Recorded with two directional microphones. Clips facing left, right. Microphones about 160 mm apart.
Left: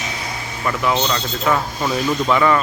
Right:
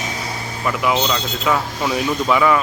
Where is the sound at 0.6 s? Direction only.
10° right (ahead or behind).